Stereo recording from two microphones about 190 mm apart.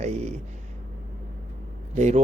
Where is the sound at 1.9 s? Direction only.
35° right (ahead or behind).